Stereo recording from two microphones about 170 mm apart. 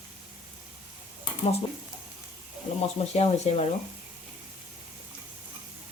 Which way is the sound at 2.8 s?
35° left (ahead or behind).